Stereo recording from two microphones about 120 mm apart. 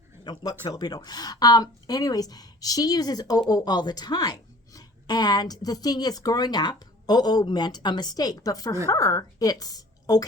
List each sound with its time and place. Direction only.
0.3 s a woman's voice: 35° left (ahead or behind)